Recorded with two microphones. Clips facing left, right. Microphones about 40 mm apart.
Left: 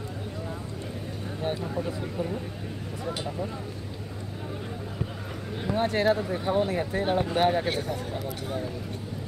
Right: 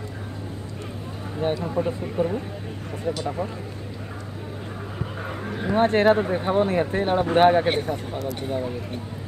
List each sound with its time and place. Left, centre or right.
1.8 s speech: right
5.7 s speech: right